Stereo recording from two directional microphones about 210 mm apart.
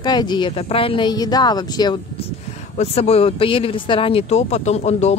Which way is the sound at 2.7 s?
30° left (ahead or behind).